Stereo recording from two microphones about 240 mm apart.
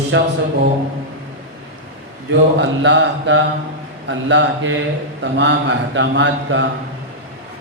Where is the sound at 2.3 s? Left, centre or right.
Right.